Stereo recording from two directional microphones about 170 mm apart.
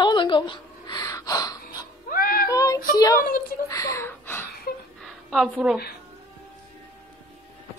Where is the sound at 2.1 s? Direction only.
55° left (ahead or behind).